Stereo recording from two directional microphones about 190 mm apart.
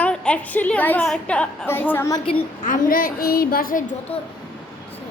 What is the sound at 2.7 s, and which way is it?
A woman's voice, 45° left (ahead or behind).